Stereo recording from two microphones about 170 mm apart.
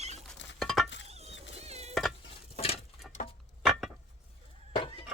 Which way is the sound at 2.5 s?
35° left (ahead or behind).